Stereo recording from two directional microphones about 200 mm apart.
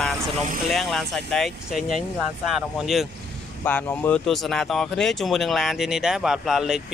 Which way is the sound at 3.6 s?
10° left (ahead or behind).